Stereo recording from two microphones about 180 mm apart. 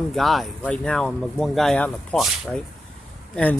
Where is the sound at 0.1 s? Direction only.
Centre (ahead or behind).